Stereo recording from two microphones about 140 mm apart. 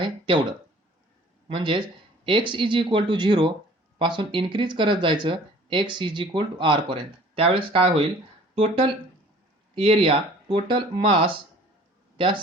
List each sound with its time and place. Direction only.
0.0 s a sound: 35° right (ahead or behind)
1.5 s speech: 40° right (ahead or behind)
9.7 s speech: 40° right (ahead or behind)